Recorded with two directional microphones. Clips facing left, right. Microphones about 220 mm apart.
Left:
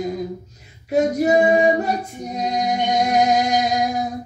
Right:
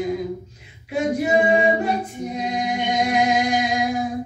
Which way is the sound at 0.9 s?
40° left (ahead or behind).